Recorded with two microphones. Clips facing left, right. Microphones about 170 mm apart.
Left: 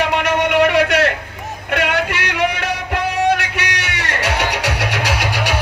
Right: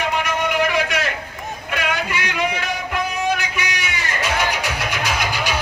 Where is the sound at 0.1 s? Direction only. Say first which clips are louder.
Left 5 dB; 70° left (ahead or behind).